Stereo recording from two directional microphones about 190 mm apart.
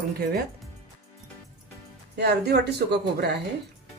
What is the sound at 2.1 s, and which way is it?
Speech, 60° right (ahead or behind).